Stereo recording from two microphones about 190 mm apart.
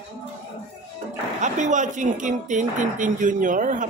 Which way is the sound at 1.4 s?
40° right (ahead or behind).